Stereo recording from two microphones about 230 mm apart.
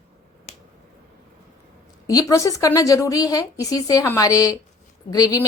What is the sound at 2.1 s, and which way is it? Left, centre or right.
A woman's voice, centre.